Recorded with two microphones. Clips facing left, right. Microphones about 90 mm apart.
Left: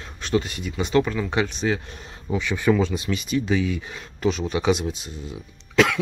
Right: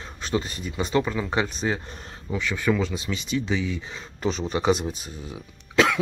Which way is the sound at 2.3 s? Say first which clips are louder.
Left 3 dB; 20° left (ahead or behind).